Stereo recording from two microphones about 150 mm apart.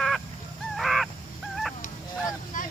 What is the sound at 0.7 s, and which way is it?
Crow, centre (ahead or behind).